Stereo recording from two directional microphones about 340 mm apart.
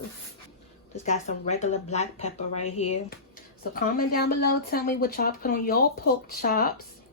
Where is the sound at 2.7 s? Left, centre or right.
Centre.